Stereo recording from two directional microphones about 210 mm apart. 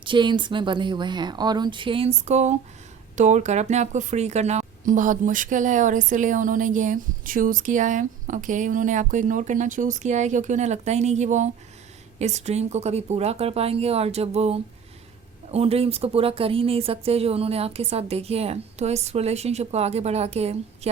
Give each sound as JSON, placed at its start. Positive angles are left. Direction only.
{"t": 0.0, "sound": "a woman's voice", "side_deg": -25}